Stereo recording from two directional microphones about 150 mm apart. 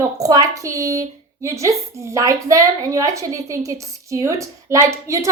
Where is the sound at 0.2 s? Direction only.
25° right (ahead or behind).